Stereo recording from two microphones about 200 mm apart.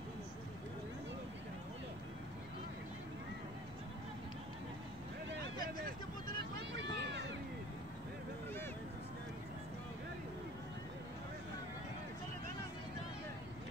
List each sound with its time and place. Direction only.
6.7 s run: 65° right (ahead or behind)